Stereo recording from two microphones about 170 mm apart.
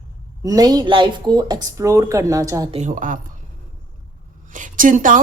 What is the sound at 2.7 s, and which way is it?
Speech, 45° right (ahead or behind).